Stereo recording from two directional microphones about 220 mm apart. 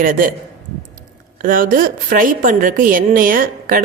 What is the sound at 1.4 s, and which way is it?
A woman's voice, 40° right (ahead or behind).